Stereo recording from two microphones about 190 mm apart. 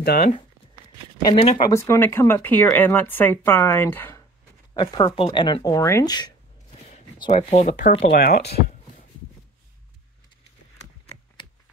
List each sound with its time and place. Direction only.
1.2 s speech: 30° left (ahead or behind)
1.7 s speech: 15° left (ahead or behind)
4.7 s speech: 25° left (ahead or behind)
8.1 s speech: 55° left (ahead or behind)